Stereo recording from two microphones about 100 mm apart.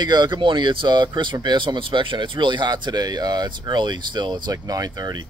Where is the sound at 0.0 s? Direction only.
45° right (ahead or behind).